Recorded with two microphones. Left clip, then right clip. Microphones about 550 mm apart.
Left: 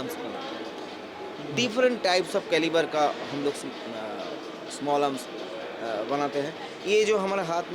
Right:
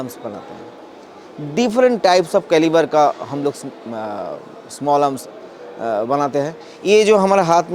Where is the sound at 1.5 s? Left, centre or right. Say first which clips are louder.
Right 9 dB; right.